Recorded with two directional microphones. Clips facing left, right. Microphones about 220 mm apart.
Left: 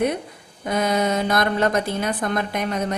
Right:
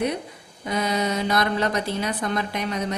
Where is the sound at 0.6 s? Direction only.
50° left (ahead or behind).